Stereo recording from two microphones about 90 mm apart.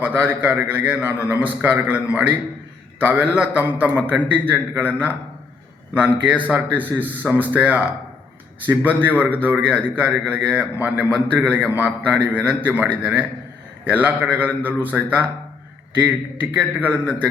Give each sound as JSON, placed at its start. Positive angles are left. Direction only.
{"t": 0.0, "sound": "a man's voice", "side_deg": -20}